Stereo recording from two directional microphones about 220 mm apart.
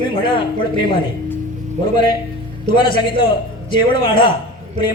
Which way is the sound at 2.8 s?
20° left (ahead or behind).